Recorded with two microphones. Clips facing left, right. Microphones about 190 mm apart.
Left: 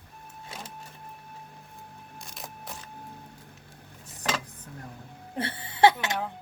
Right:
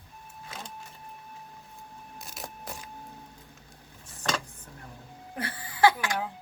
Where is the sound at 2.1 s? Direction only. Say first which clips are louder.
Right 2 dB; centre (ahead or behind).